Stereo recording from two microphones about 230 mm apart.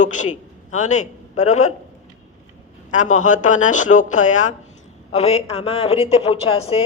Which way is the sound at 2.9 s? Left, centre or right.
Left.